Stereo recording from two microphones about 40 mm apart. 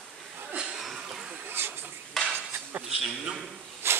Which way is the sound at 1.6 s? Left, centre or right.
Right.